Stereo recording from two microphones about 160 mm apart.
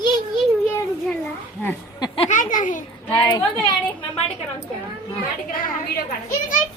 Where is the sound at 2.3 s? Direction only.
55° left (ahead or behind).